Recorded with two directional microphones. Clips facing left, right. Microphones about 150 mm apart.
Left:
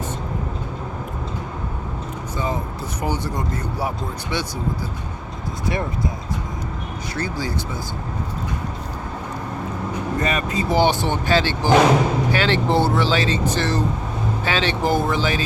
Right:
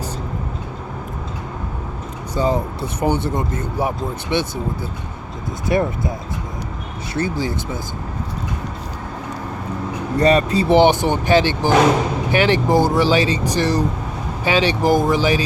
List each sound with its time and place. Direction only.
2.3 s speech: 30° right (ahead or behind)
7.2 s speech: 20° right (ahead or behind)
10.2 s speech: 35° right (ahead or behind); by 15.4 s 15° right (ahead or behind)